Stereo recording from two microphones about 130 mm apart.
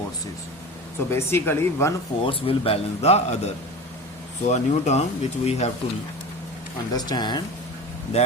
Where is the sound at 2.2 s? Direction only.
45° left (ahead or behind).